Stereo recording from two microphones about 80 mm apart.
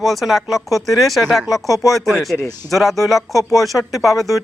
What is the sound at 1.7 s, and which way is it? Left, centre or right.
Speech, left.